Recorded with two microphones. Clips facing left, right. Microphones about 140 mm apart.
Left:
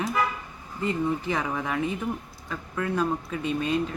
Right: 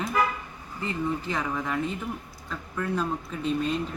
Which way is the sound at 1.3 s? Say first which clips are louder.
Left 1 dB; 5° left (ahead or behind).